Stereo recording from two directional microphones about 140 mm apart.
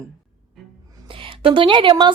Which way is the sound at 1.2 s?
40° right (ahead or behind).